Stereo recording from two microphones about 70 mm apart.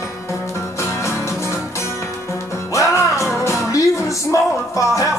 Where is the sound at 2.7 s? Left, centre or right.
Left.